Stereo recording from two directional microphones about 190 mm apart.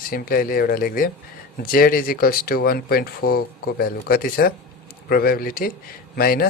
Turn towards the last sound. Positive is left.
turn(degrees=50)  # may be behind; listen again after turning